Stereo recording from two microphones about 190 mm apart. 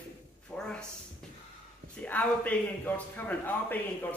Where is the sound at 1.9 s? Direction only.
10° left (ahead or behind).